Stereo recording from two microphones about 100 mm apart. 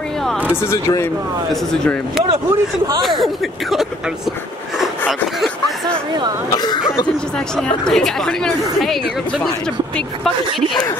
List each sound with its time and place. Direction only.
0.6 s speech: 30° left (ahead or behind)
3.0 s a woman's voice: centre (ahead or behind)
6.5 s speech: 45° left (ahead or behind)
7.5 s a woman's voice: 10° left (ahead or behind)